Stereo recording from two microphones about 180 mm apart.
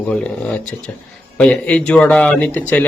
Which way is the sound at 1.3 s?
5° left (ahead or behind).